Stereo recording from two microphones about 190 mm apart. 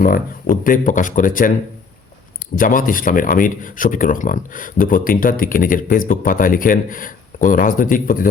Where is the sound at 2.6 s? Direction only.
45° left (ahead or behind).